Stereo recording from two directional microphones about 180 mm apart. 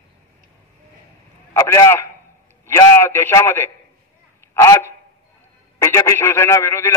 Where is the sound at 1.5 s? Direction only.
15° left (ahead or behind).